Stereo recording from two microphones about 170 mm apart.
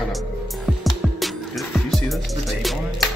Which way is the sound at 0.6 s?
Centre (ahead or behind).